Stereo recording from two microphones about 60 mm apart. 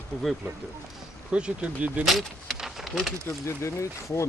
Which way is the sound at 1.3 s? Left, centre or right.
Right.